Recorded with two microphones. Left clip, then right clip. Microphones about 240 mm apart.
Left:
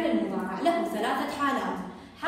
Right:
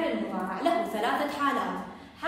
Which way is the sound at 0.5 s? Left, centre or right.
Centre.